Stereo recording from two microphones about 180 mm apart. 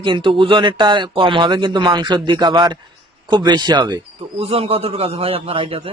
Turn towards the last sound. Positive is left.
turn(degrees=-30)  # may be behind; listen again after turning